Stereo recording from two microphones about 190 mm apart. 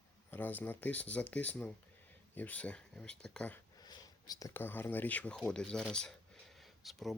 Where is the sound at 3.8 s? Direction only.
20° left (ahead or behind); by 7.1 s centre (ahead or behind).